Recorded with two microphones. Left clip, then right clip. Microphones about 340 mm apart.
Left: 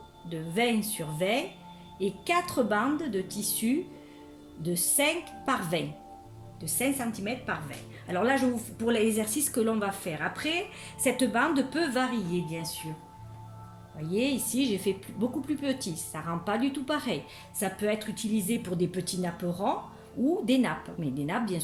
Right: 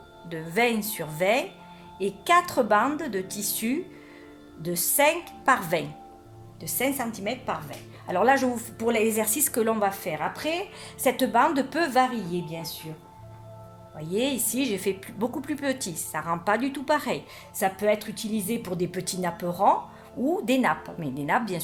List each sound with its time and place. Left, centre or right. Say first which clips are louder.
0.3 s a woman's voice: right 4 dB; centre
14.0 s a woman's voice: right 2 dB; right